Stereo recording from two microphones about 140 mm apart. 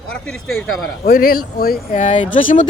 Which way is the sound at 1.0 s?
75° left (ahead or behind).